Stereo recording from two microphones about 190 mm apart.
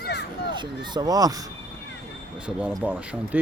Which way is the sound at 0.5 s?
25° right (ahead or behind).